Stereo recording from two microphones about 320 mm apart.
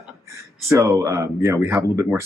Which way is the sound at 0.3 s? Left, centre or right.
Centre.